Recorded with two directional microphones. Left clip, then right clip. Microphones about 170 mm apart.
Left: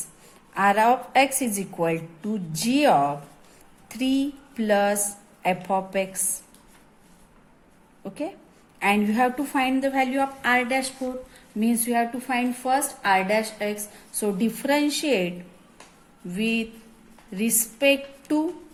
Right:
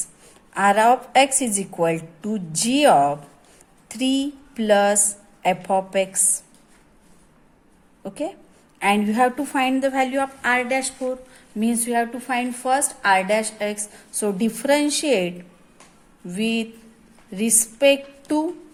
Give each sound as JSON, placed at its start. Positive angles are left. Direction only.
{"t": 0.5, "sound": "a woman's voice", "side_deg": -25}
{"t": 8.0, "sound": "a woman's voice", "side_deg": -25}
{"t": 16.3, "sound": "a woman's voice", "side_deg": -25}